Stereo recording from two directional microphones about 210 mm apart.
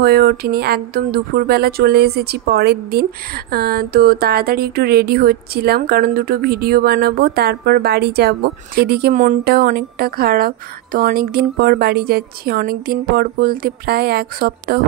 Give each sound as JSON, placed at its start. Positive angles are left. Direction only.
{"t": 0.0, "sound": "speech", "side_deg": -50}